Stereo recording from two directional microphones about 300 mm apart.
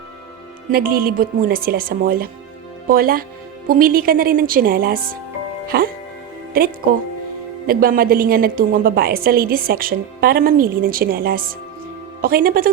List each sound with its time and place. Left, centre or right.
0.7 s a woman's voice: right